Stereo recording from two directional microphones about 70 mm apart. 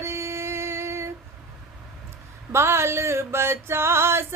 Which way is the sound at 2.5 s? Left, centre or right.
Right.